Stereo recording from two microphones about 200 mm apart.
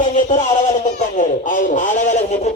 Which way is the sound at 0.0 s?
40° left (ahead or behind).